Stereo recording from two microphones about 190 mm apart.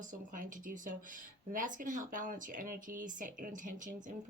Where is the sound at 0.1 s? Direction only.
45° right (ahead or behind).